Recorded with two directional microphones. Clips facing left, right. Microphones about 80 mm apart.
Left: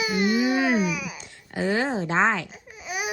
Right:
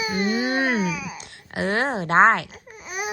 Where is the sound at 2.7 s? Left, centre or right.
Right.